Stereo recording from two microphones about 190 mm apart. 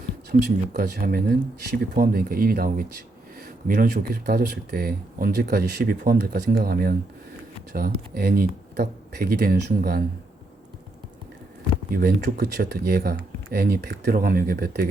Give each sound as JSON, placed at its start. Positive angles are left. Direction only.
{"t": 0.3, "sound": "speech", "side_deg": -55}
{"t": 11.9, "sound": "speech", "side_deg": -50}